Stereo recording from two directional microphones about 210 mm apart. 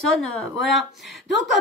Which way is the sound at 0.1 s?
5° left (ahead or behind).